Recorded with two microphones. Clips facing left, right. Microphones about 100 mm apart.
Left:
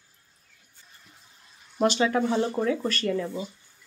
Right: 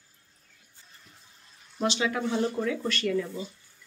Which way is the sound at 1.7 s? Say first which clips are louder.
Left 5 dB; 50° left (ahead or behind).